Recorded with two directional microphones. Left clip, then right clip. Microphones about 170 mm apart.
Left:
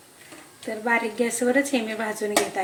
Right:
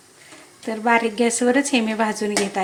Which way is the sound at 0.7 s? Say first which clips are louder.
Right 5 dB; 60° right (ahead or behind).